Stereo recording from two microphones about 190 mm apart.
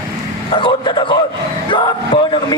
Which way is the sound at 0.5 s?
25° left (ahead or behind).